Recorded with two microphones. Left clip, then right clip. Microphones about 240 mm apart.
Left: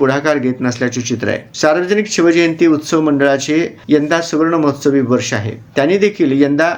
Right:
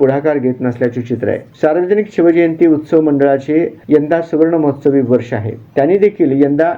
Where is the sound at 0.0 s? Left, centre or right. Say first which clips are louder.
Right 1 dB; centre.